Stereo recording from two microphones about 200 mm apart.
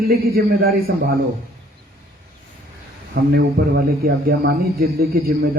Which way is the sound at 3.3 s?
50° right (ahead or behind).